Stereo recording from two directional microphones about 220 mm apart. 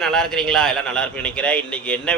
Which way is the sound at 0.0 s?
Centre (ahead or behind).